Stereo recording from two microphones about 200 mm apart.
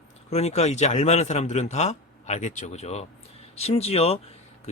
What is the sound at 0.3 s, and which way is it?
A man's voice, 30° left (ahead or behind).